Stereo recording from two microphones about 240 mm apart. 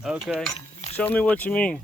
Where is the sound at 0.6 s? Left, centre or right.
Left.